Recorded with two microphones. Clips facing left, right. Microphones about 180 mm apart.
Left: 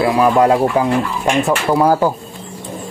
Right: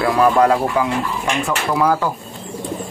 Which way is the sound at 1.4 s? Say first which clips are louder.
Left 3 dB; 35° left (ahead or behind).